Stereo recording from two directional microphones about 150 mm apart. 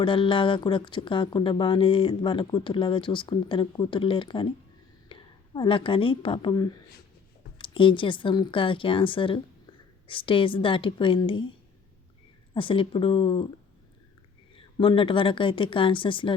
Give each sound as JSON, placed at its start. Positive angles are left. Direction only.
{"t": 0.0, "sound": "a woman's voice", "side_deg": 35}
{"t": 12.5, "sound": "speech", "side_deg": 35}
{"t": 14.5, "sound": "speech", "side_deg": 35}